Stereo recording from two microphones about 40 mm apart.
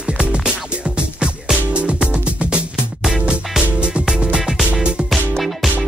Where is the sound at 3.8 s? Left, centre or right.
Right.